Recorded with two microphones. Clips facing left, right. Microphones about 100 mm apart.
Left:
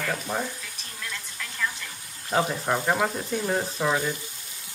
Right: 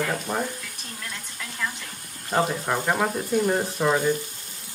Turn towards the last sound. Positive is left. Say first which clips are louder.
# right 4 dB
turn(degrees=-10)  # may be behind; listen again after turning